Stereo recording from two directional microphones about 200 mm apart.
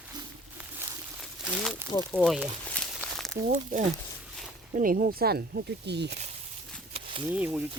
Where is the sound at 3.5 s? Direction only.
40° right (ahead or behind); by 6.1 s 55° right (ahead or behind).